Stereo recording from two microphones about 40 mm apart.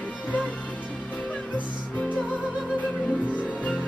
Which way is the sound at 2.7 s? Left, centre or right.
Left.